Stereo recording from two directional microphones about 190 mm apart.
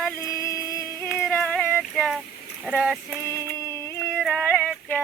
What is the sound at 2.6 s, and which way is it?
Speech, 5° right (ahead or behind).